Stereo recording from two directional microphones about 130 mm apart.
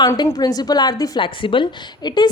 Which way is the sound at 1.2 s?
40° left (ahead or behind).